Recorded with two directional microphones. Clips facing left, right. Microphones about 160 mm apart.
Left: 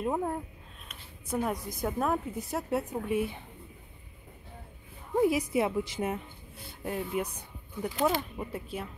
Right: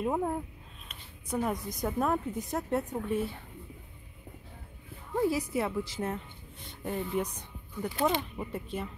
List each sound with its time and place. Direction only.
0.0 s a woman's voice: centre (ahead or behind)
5.1 s a woman's voice: 15° left (ahead or behind)